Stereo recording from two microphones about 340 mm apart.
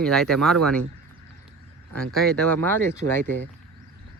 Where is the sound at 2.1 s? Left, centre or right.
Centre.